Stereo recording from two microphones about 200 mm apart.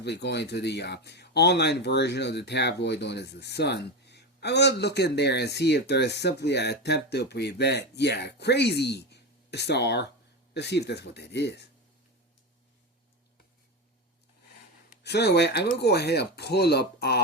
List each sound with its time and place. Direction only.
0.0 s speech: 55° left (ahead or behind)
15.0 s speech: 55° left (ahead or behind)